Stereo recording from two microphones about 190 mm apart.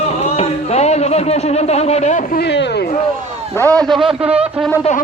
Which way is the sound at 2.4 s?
65° left (ahead or behind).